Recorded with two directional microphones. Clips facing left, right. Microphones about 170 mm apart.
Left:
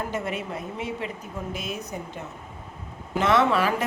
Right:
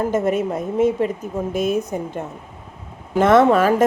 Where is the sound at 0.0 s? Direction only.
45° right (ahead or behind).